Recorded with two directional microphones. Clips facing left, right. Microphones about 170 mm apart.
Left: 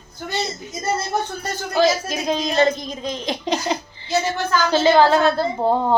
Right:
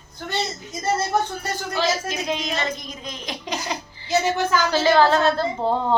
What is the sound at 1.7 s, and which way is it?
Speech, 40° left (ahead or behind).